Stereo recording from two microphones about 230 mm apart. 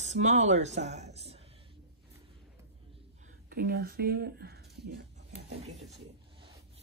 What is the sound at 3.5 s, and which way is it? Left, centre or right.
Speech, right.